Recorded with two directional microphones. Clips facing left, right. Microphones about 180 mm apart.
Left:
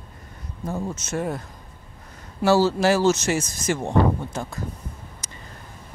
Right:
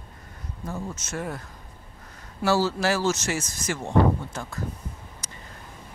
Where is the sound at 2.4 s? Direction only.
25° left (ahead or behind).